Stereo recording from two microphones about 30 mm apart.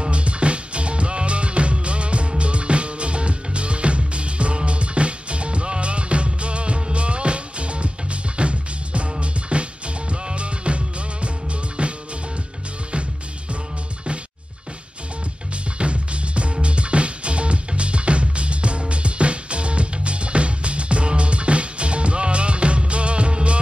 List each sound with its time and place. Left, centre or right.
0.1 s music: right
15.8 s music: right